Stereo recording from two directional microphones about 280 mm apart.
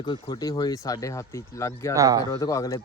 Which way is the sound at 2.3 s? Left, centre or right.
Centre.